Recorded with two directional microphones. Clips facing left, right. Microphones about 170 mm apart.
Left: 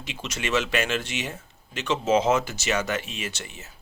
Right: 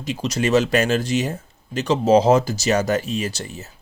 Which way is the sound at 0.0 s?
40° right (ahead or behind).